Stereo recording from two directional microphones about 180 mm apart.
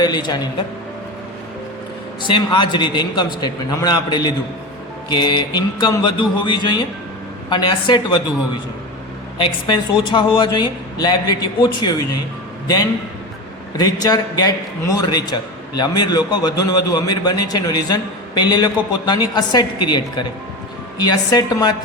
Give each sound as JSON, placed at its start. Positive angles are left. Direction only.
{"t": 0.0, "sound": "a man's voice", "side_deg": 25}
{"t": 2.2, "sound": "a man's voice", "side_deg": 25}
{"t": 9.6, "sound": "a man's voice", "side_deg": 25}